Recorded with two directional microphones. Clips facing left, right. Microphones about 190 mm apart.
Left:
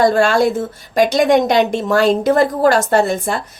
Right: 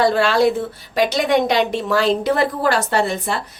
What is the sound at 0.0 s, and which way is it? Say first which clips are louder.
Speech: left 2 dB; 45° left (ahead or behind).